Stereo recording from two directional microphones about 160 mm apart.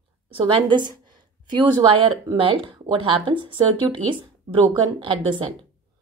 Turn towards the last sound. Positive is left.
turn(degrees=-30)  # may be behind; listen again after turning